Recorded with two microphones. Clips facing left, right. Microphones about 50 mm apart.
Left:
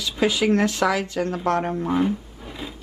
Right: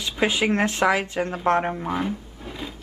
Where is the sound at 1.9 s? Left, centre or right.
Centre.